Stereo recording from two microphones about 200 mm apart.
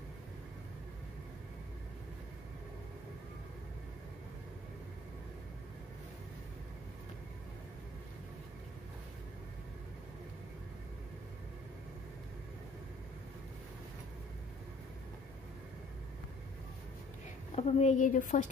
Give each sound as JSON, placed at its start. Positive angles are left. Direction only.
{"t": 17.6, "sound": "speech", "side_deg": 35}